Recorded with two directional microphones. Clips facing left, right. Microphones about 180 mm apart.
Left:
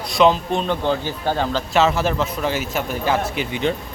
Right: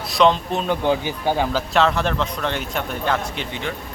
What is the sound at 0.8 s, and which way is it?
Speech, 15° right (ahead or behind).